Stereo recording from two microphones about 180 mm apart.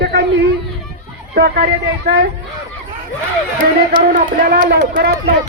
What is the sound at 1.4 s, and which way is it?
Speech, 60° right (ahead or behind).